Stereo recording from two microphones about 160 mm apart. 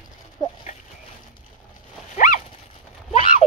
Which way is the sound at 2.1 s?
55° left (ahead or behind).